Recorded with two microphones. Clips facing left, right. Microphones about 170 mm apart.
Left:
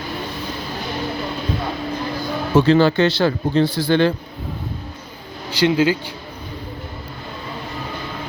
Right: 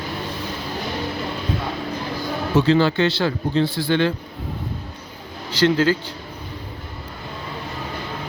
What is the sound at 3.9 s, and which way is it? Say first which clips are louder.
Speech: left 4 dB; 35° left (ahead or behind).